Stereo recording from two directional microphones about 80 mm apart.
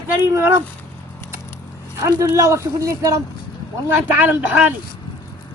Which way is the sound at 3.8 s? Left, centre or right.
Right.